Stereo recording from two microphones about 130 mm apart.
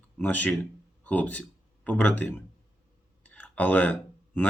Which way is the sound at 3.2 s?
10° left (ahead or behind).